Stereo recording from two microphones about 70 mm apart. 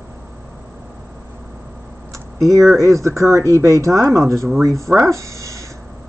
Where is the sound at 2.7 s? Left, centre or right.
Right.